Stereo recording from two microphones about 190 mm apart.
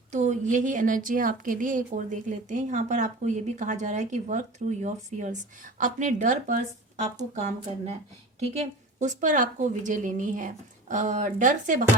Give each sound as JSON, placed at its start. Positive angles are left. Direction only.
{"t": 0.1, "sound": "a woman's voice", "side_deg": -40}